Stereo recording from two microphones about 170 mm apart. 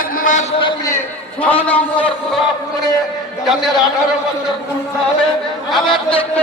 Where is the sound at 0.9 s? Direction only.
10° left (ahead or behind).